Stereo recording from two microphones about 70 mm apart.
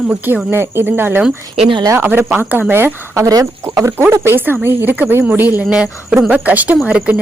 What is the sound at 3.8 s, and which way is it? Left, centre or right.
Speech, right.